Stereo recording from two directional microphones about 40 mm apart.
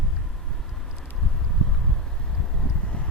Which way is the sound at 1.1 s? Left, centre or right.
Centre.